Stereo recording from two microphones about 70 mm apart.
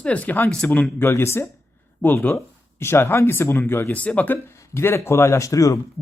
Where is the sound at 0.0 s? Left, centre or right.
Centre.